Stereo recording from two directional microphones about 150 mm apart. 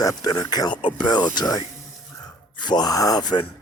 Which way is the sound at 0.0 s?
25° left (ahead or behind).